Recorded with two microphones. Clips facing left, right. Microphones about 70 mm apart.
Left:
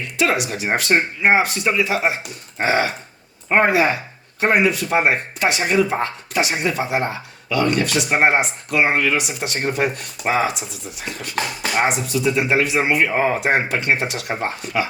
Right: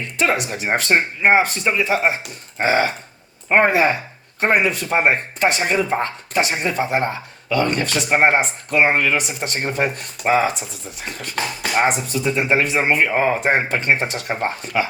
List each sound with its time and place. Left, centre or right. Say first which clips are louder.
0.2 s speech: even; right